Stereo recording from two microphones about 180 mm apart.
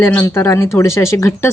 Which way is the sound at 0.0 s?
15° left (ahead or behind).